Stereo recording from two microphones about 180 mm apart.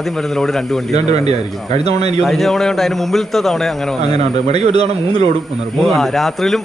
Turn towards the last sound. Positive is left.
turn(degrees=0)  # may be behind; listen again after turning